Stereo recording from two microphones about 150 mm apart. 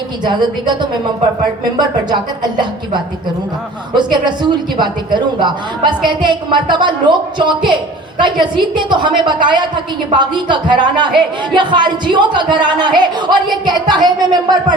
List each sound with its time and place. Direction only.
0.3 s speech: 30° right (ahead or behind)
2.0 s speech: 30° right (ahead or behind)